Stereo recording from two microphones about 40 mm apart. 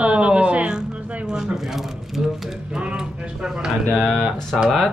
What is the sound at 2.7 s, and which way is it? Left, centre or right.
A woman's voice, right.